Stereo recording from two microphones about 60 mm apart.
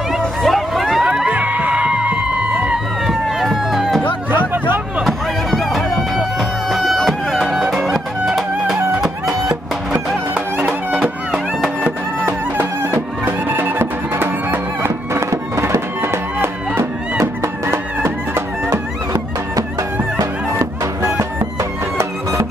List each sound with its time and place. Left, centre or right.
0.4 s vehicle: centre
1.0 s music: centre
3.3 s a sound: centre
4.3 s music: right
5.0 s music: centre
11.0 s music: centre
11.8 s music: right
15.1 s music: right
18.7 s music: right
20.8 s music: right